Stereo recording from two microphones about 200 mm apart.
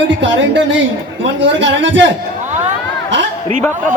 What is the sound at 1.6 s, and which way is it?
Speech, 65° right (ahead or behind).